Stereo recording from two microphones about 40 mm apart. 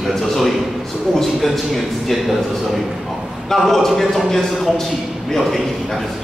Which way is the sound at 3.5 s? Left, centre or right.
Centre.